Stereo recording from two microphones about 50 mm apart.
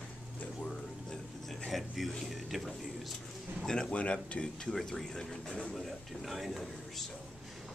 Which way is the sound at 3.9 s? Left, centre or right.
Left.